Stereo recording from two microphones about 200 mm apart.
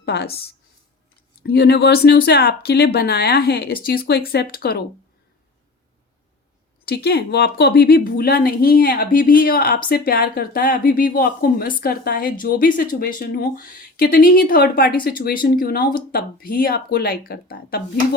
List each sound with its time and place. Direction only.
0.0 s speech: 55° left (ahead or behind)
1.5 s speech: 55° left (ahead or behind)
6.8 s speech: 55° left (ahead or behind)